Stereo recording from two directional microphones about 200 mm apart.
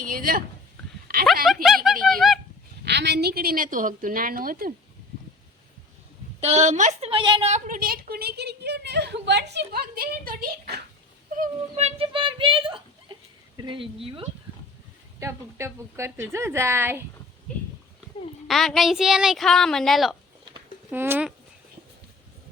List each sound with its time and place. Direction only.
0.0 s speech: 45° right (ahead or behind)
1.6 s speech: centre (ahead or behind)
2.8 s a woman's voice: 55° right (ahead or behind)
6.4 s a woman's voice: 35° right (ahead or behind); by 10.8 s 50° right (ahead or behind)
11.3 s speech: 30° right (ahead or behind)
15.2 s a woman's voice: 15° right (ahead or behind)
18.4 s a woman's voice: centre (ahead or behind)
20.9 s a woman's voice: 10° right (ahead or behind)